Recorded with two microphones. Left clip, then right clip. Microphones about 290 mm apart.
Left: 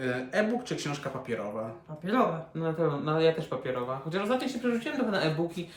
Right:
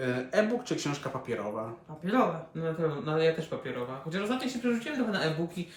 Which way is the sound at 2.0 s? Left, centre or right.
Centre.